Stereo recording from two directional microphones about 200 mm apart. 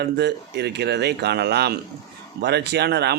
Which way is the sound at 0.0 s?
55° right (ahead or behind).